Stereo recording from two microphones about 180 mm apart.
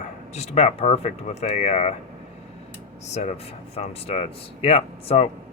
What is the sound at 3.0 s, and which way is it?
Speech, 40° left (ahead or behind).